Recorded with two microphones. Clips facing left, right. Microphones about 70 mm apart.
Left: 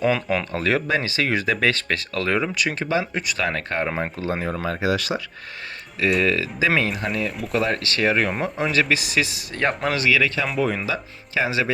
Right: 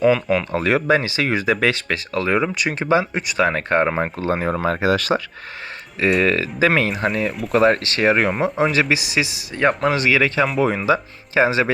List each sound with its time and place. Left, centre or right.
0.0 s speech: centre
0.5 s speech: right
4.2 s speech: right
7.9 s speech: right
8.3 s speech: centre
8.7 s speech: centre
9.9 s speech: right